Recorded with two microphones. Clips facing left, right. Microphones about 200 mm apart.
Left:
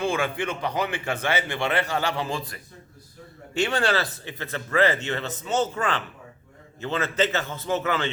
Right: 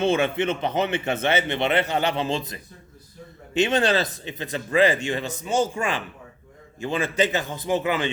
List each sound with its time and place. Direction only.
0.0 s a man's voice: 25° right (ahead or behind)